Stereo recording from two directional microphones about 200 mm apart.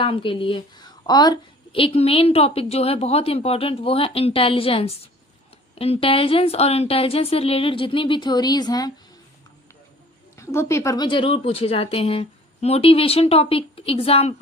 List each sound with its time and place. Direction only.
0.0 s a woman's voice: 25° left (ahead or behind)
10.3 s a woman's voice: 15° left (ahead or behind); by 14.3 s 30° left (ahead or behind)